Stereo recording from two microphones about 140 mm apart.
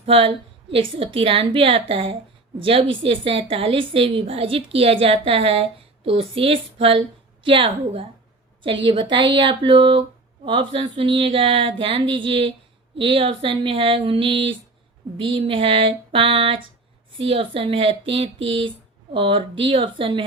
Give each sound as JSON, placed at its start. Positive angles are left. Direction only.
{"t": 0.0, "sound": "a woman's voice", "side_deg": -45}